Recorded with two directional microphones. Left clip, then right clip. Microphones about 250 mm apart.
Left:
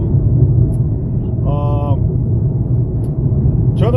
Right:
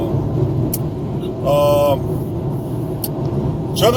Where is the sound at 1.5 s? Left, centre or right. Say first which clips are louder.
Right 11 dB; centre.